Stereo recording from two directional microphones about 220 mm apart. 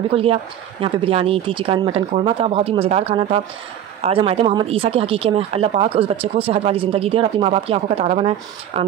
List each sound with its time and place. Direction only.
0.1 s speech: 25° right (ahead or behind)